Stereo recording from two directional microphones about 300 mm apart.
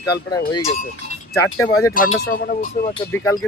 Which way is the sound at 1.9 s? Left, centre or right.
Left.